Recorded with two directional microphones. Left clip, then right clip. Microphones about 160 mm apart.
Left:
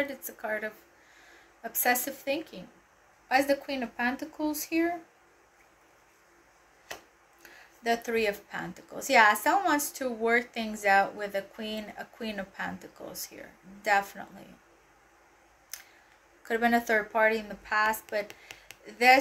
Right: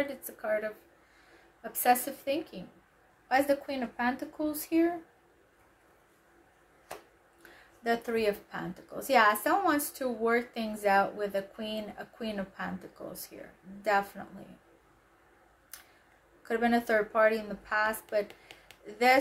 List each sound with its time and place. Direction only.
0.0 s a woman's voice: 15° right (ahead or behind)
7.8 s a woman's voice: 20° right (ahead or behind)
16.4 s a woman's voice: 15° right (ahead or behind)
18.3 s a sound: 5° right (ahead or behind)